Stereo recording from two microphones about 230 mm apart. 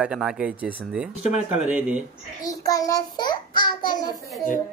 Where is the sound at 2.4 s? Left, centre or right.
Centre.